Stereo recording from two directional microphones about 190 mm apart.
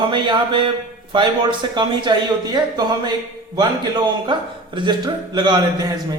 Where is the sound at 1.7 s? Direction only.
25° right (ahead or behind).